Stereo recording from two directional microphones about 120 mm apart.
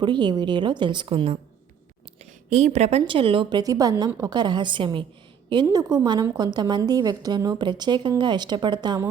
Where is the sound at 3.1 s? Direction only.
45° right (ahead or behind).